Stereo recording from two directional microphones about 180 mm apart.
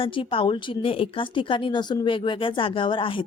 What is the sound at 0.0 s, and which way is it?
A woman's voice, 30° left (ahead or behind).